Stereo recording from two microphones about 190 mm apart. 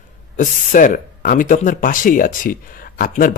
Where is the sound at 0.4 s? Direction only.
45° left (ahead or behind).